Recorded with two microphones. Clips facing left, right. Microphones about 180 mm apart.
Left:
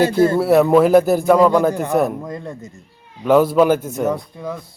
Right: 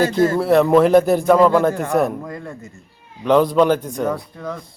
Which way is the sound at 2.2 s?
20° left (ahead or behind).